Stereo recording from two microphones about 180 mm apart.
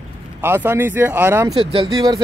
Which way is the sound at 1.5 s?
30° right (ahead or behind).